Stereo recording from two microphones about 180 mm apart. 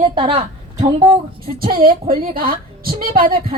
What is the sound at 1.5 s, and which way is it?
A woman's voice, 55° right (ahead or behind).